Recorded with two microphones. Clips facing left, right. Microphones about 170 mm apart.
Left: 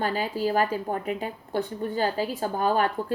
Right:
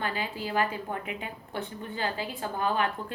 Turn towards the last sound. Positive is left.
turn(degrees=40)  # may be behind; listen again after turning